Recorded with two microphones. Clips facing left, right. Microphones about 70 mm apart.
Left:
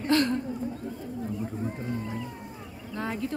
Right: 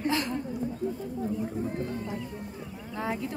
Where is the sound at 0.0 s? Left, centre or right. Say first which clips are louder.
Left 4 dB; centre.